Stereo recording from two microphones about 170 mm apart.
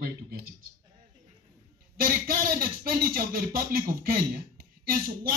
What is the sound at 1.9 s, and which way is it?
Speech, 60° right (ahead or behind).